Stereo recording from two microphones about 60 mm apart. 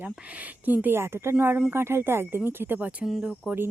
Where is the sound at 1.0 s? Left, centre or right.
Right; by 3.5 s centre.